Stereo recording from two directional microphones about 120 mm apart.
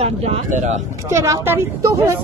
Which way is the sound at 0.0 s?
60° right (ahead or behind).